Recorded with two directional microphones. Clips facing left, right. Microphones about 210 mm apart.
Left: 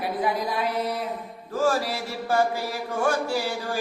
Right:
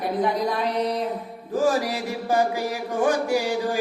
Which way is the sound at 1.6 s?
15° right (ahead or behind).